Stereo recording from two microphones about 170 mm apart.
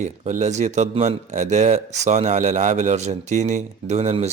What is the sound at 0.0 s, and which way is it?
A man's voice, 45° right (ahead or behind).